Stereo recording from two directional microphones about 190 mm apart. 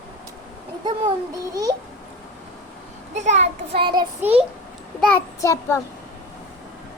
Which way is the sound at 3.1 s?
35° right (ahead or behind).